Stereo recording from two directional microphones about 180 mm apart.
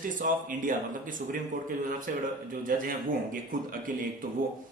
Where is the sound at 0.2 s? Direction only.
50° right (ahead or behind).